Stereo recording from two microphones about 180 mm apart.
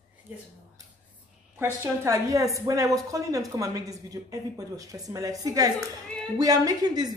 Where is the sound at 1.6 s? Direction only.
15° right (ahead or behind).